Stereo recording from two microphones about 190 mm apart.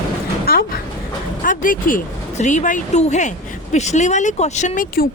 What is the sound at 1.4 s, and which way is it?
Speech, 45° left (ahead or behind).